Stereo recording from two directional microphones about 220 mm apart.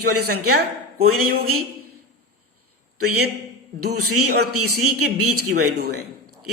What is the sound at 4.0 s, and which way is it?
Speech, 90° right.